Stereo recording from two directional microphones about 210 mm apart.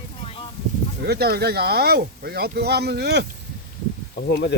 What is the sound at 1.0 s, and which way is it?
Speech, 50° right (ahead or behind).